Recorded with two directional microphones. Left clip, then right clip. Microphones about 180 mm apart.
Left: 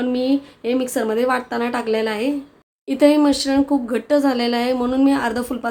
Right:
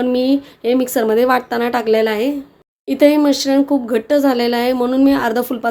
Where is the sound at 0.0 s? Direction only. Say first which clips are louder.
Right 4 dB; 25° right (ahead or behind).